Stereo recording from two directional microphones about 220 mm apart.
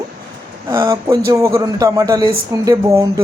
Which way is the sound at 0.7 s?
15° right (ahead or behind).